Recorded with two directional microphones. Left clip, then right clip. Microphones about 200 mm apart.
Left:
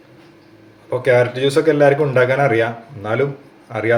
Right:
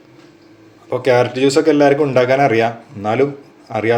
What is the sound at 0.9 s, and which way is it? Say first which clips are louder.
A man's voice: right 1 dB; 30° right (ahead or behind).